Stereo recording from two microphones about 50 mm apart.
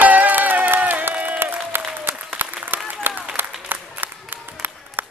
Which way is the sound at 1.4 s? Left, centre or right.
Right.